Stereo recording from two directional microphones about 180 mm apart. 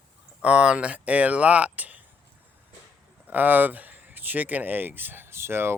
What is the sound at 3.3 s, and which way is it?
Speech, 10° right (ahead or behind).